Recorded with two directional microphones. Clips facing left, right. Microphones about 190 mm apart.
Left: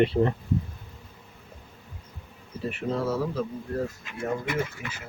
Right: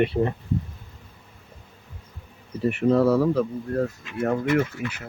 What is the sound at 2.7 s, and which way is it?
Speech, 65° right (ahead or behind).